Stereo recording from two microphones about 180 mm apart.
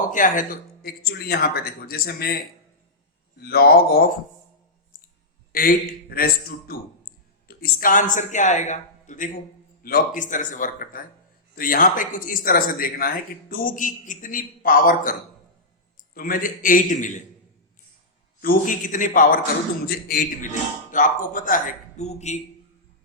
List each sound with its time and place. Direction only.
0.1 s speech: 45° left (ahead or behind)
5.5 s a man's voice: 55° left (ahead or behind)
16.1 s speech: 50° left (ahead or behind)
18.4 s speech: 45° left (ahead or behind)